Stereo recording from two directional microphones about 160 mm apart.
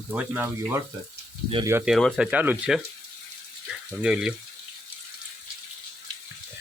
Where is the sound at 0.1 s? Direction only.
10° right (ahead or behind).